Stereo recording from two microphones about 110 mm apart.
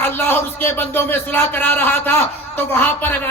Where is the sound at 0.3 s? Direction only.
20° left (ahead or behind).